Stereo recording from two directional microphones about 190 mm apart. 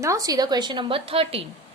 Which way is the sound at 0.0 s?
15° right (ahead or behind).